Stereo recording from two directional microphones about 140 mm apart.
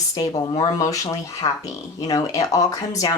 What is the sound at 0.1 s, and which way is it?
Speech, 30° left (ahead or behind).